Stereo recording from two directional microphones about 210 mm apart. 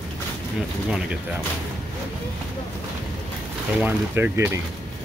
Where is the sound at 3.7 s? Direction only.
10° right (ahead or behind).